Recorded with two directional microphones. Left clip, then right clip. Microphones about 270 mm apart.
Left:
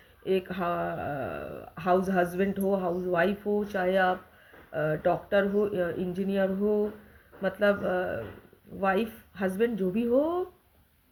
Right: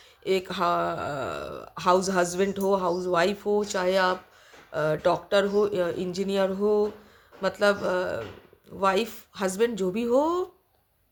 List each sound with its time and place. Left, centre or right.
0.3 s speech: centre